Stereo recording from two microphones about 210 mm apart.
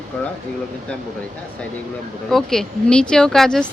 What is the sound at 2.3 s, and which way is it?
Speech, centre (ahead or behind).